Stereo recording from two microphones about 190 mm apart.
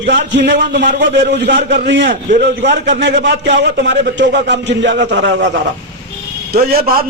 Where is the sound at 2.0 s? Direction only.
50° right (ahead or behind).